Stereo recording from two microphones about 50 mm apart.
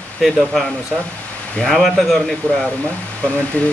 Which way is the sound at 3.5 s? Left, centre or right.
Left.